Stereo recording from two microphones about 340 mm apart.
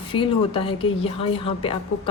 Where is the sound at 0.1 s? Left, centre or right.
Centre.